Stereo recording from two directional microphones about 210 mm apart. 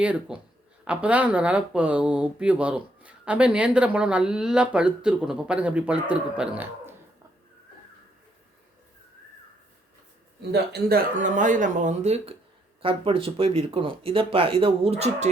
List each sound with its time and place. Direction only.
0.0 s speech: 5° right (ahead or behind)
10.5 s speech: 50° right (ahead or behind); by 15.3 s 30° right (ahead or behind)